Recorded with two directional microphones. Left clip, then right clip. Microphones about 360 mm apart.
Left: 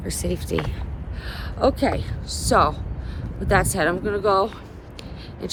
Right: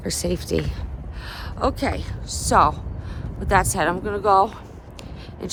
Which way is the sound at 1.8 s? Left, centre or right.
Centre.